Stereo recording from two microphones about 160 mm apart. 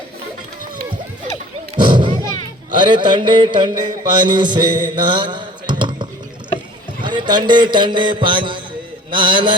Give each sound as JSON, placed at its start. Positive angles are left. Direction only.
{"t": 1.7, "sound": "thump", "side_deg": -30}
{"t": 2.7, "sound": "speech", "side_deg": -30}
{"t": 4.1, "sound": "mantra", "side_deg": -30}
{"t": 7.0, "sound": "speech", "side_deg": -30}